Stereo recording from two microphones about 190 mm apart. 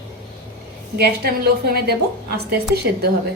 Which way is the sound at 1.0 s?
55° right (ahead or behind).